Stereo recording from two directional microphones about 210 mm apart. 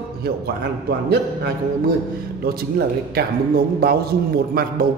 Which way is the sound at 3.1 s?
45° right (ahead or behind).